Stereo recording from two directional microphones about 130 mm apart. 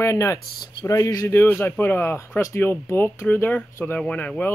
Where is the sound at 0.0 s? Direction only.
25° left (ahead or behind).